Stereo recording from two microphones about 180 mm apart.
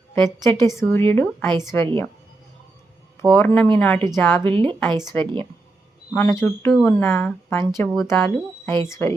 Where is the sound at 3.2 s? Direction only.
5° left (ahead or behind).